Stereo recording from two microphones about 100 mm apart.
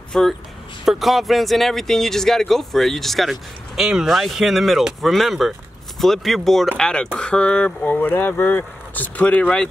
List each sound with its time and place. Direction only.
0.1 s speech: 5° left (ahead or behind)